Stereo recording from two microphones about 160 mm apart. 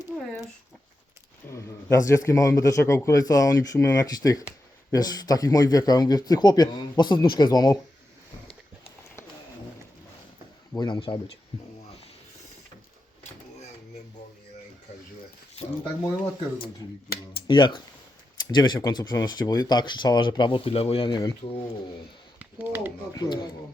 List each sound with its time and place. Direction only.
0.1 s a sound: 10° left (ahead or behind)
1.5 s speech: 20° left (ahead or behind)
10.8 s speech: 30° left (ahead or behind)
17.5 s speech: 30° left (ahead or behind)
22.4 s a sound: 10° right (ahead or behind)
23.1 s speech: 25° left (ahead or behind)